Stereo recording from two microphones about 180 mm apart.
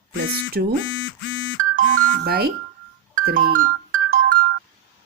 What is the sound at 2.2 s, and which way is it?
Speech, 60° right (ahead or behind).